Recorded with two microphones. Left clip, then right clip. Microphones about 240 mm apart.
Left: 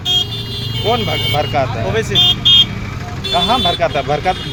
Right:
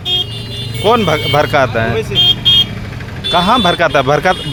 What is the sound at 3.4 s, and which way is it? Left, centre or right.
Speech, right.